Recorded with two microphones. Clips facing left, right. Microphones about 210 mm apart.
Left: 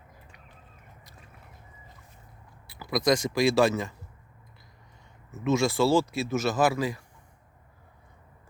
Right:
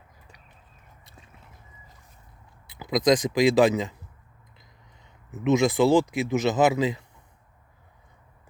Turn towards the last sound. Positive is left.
turn(degrees=-20)  # may be behind; listen again after turning